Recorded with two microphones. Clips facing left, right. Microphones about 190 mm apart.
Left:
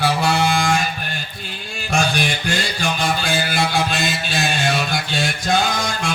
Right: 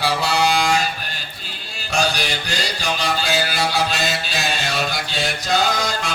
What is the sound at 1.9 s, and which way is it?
Mantra, 55° left (ahead or behind).